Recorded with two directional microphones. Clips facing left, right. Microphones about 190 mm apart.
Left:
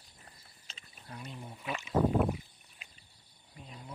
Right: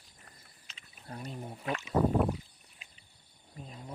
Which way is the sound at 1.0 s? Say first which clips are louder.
Right 4 dB; 35° right (ahead or behind).